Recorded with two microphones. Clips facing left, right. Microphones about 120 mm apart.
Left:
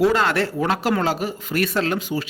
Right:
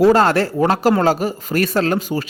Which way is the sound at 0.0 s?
40° right (ahead or behind).